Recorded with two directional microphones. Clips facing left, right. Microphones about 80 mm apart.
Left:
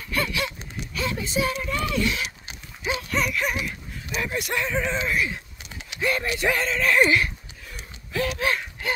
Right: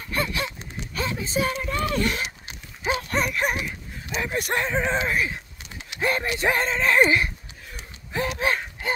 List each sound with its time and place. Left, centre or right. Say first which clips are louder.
0.1 s a sound: even; right
0.9 s speech: even; right
2.8 s dog: right 1 dB; right
4.1 s speech: even; right
4.4 s speech: right 3 dB; right
4.6 s speech: right 2 dB; right
8.1 s a sound: even; right